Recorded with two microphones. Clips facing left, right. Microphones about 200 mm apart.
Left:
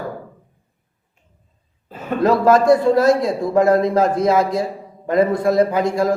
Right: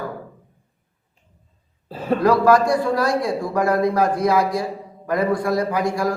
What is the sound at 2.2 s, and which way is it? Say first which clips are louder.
A man's voice: left 3 dB; 25° left (ahead or behind).